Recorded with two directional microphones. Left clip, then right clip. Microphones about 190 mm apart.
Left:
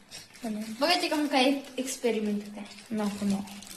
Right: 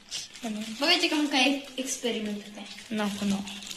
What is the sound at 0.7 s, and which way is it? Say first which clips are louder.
Speech: right 2 dB; 60° left (ahead or behind).